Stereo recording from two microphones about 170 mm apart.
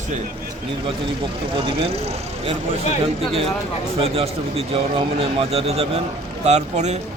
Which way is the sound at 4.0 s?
35° right (ahead or behind).